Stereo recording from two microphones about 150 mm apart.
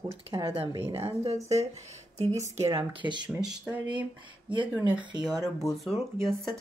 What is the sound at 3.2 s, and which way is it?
Speech, 10° right (ahead or behind).